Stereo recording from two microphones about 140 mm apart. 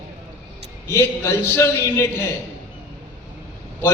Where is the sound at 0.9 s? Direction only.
20° left (ahead or behind).